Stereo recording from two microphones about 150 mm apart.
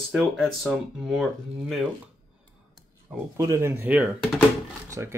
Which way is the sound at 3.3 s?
20° right (ahead or behind).